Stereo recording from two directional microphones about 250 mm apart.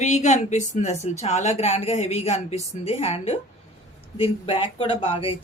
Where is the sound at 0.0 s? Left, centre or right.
Left.